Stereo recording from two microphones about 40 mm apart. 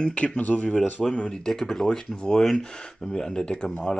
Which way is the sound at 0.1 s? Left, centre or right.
Left.